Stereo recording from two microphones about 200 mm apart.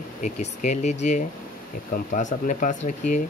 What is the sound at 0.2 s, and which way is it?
Speech, 40° left (ahead or behind).